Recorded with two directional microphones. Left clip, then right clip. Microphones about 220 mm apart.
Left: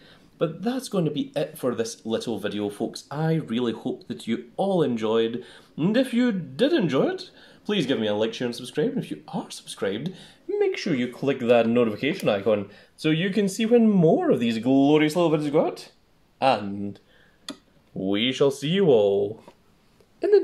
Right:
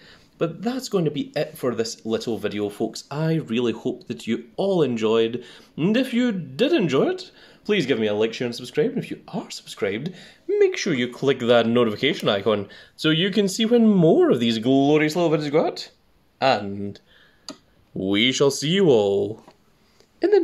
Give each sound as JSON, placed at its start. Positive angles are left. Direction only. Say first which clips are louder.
{"t": 0.9, "sound": "speech", "louder": "right 4 dB", "side_deg": -45}
{"t": 18.0, "sound": "speech", "louder": "right 3 dB", "side_deg": -45}